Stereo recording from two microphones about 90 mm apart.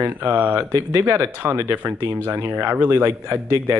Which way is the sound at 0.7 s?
35° right (ahead or behind).